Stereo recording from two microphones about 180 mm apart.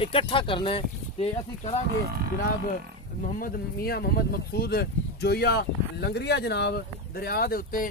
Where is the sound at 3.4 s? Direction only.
55° left (ahead or behind).